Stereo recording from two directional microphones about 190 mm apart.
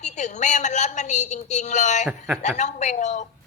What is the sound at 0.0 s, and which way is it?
A woman's voice, 40° left (ahead or behind).